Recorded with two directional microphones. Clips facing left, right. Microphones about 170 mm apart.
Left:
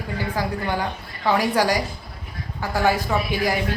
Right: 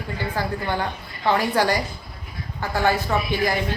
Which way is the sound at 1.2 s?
10° left (ahead or behind).